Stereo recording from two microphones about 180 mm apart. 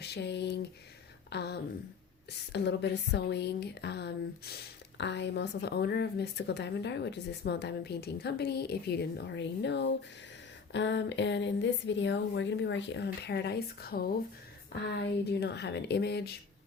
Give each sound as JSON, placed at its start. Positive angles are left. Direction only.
{"t": 0.0, "sound": "speech", "side_deg": 70}
{"t": 14.7, "sound": "speech", "side_deg": 70}